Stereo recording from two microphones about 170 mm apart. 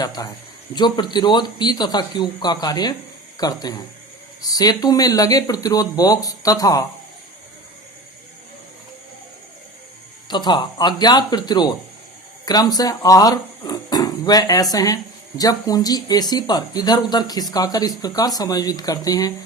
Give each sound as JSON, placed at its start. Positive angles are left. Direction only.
{"t": 0.0, "sound": "speech", "side_deg": 20}
{"t": 10.2, "sound": "speech", "side_deg": 25}